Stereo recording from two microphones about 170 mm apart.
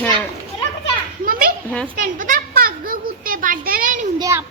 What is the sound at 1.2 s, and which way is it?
Children playing, 55° right (ahead or behind).